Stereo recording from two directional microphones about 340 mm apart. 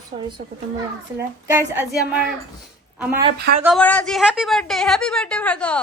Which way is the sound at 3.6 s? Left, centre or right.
Centre.